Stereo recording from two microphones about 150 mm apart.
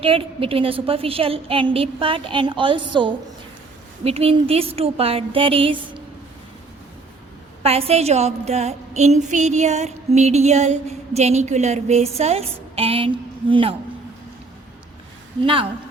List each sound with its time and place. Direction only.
0.0 s a woman's voice: 40° right (ahead or behind)
7.6 s a woman's voice: 40° right (ahead or behind)